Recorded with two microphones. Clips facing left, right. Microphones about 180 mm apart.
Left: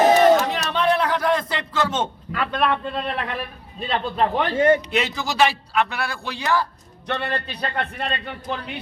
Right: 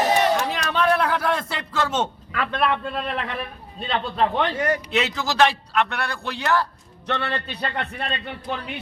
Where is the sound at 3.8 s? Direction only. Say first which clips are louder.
Left 1 dB; 5° left (ahead or behind).